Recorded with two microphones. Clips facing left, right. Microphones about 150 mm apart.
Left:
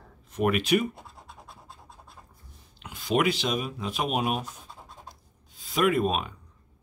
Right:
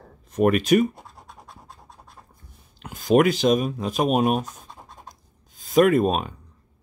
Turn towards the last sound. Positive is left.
turn(degrees=-40)  # may be behind; listen again after turning